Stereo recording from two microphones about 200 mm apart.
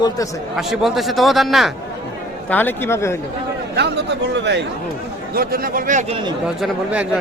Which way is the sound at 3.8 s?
55° right (ahead or behind).